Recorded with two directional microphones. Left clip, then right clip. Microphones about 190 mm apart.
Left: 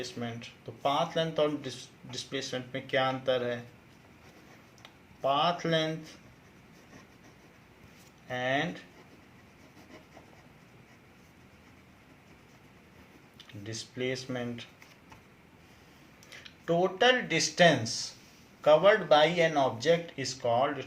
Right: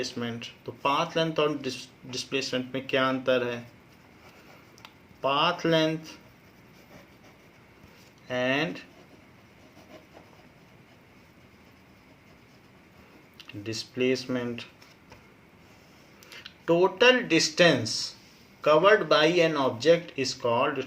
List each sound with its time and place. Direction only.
0.0 s speech: 45° right (ahead or behind)
5.2 s speech: 45° right (ahead or behind)
8.3 s speech: 45° right (ahead or behind)
13.4 s speech: 45° right (ahead or behind)
16.6 s speech: 45° right (ahead or behind)